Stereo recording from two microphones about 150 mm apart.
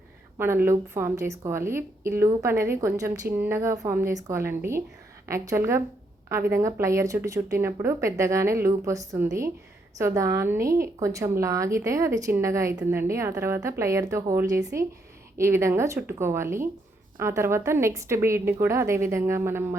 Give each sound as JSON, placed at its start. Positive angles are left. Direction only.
{"t": 0.3, "sound": "a woman's voice", "side_deg": -15}